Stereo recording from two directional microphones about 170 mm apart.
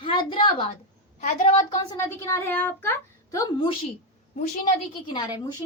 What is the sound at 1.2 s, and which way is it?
Speech, 45° left (ahead or behind).